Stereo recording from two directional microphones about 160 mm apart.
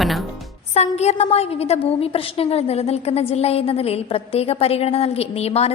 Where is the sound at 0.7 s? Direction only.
40° left (ahead or behind).